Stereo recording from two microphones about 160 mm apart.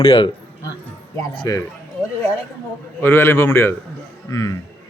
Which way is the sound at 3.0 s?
15° left (ahead or behind).